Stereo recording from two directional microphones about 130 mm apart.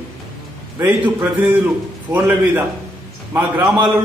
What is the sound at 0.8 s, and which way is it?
A man's voice, 15° right (ahead or behind).